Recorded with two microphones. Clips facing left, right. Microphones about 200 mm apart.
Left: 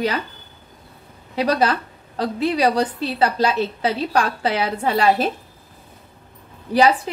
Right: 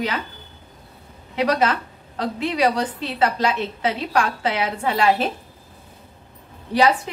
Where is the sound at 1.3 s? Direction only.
35° left (ahead or behind).